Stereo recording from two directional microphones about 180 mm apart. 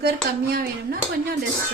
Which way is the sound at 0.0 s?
55° right (ahead or behind).